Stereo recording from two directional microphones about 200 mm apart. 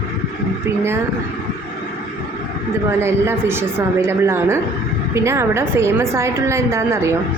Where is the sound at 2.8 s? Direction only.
10° right (ahead or behind).